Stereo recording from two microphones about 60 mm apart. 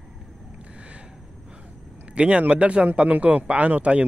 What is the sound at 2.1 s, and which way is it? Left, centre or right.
Speech, centre.